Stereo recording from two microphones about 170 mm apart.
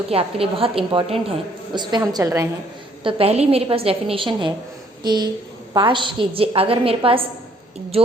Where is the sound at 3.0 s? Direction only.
35° right (ahead or behind).